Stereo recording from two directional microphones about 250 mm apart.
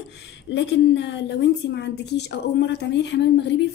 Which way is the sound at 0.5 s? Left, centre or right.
Left.